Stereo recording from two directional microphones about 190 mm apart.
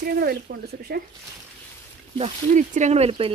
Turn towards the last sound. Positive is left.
turn(degrees=-30)  # may be behind; listen again after turning